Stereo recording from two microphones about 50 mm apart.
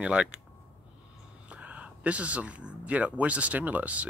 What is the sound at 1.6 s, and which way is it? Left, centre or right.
Speech, right.